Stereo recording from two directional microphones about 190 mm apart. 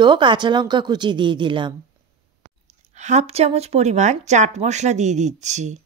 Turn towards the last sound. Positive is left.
turn(degrees=-40)  # may be behind; listen again after turning